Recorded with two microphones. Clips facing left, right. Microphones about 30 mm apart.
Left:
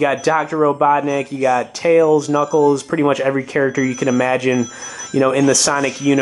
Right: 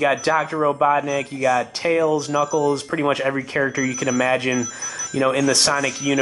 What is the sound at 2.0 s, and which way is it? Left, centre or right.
Speech, right.